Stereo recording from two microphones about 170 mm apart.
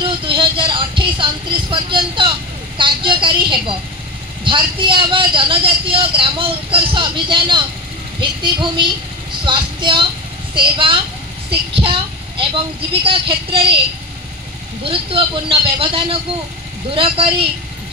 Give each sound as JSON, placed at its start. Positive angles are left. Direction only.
{"t": 0.0, "sound": "a sound", "side_deg": -30}
{"t": 2.8, "sound": "a woman's voice", "side_deg": -30}
{"t": 14.9, "sound": "a woman's voice", "side_deg": -30}